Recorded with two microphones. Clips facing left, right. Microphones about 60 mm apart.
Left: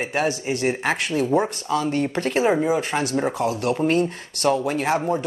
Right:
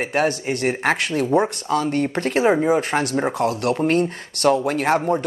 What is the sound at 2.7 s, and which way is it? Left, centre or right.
Speech, right.